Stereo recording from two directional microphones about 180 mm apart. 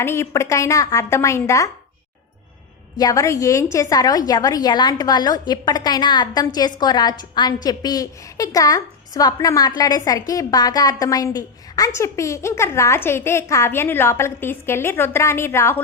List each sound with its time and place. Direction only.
0.0 s a woman's voice: 15° left (ahead or behind)
3.0 s a woman's voice: 20° left (ahead or behind)